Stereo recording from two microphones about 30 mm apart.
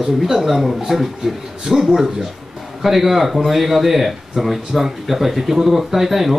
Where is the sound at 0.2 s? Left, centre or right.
Centre.